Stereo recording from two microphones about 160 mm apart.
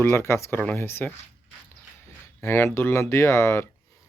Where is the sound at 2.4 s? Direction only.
15° left (ahead or behind).